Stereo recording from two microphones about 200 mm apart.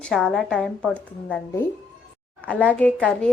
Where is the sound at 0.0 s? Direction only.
Centre (ahead or behind).